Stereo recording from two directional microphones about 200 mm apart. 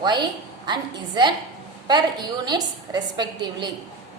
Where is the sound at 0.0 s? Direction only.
20° right (ahead or behind).